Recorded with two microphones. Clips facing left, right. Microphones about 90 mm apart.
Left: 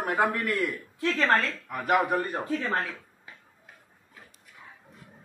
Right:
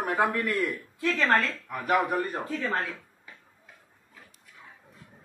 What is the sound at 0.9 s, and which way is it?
Speech, 25° left (ahead or behind).